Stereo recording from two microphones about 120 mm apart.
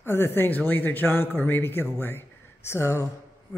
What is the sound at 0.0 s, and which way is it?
A man's voice, 20° left (ahead or behind).